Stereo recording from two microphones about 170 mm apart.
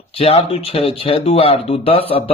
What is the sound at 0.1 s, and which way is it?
Speech, 35° left (ahead or behind).